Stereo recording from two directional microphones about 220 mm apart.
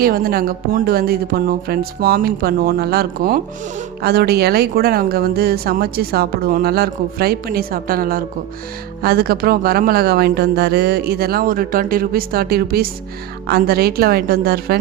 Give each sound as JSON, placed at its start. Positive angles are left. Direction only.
{"t": 0.0, "sound": "speech", "side_deg": -45}